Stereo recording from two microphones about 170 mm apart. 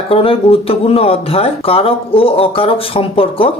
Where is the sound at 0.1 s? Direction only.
35° left (ahead or behind).